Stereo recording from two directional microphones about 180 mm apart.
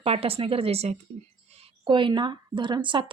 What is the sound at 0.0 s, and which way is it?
Speech, 30° right (ahead or behind).